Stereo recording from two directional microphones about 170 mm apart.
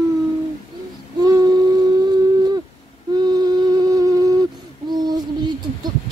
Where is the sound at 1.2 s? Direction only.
20° right (ahead or behind).